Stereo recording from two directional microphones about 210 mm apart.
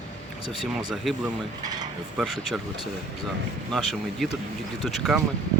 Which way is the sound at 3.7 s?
Centre (ahead or behind).